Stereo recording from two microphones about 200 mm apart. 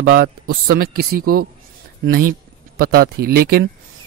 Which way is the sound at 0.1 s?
50° right (ahead or behind).